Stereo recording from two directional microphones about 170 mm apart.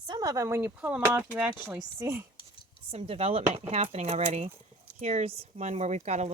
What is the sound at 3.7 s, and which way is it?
Speech, 35° right (ahead or behind).